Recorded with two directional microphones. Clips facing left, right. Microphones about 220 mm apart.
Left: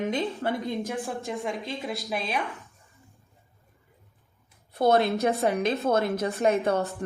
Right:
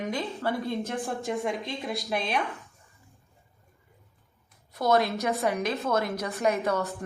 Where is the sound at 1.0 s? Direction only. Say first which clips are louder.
Right 2 dB; centre (ahead or behind).